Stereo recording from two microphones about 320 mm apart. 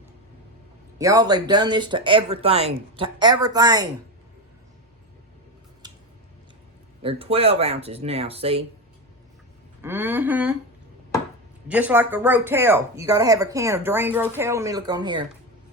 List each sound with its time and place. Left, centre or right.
0.9 s speech: centre
5.8 s scissors: centre
7.0 s speech: centre
9.8 s speech: centre
11.7 s speech: centre